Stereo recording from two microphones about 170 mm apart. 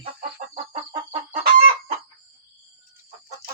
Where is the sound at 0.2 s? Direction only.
45° right (ahead or behind).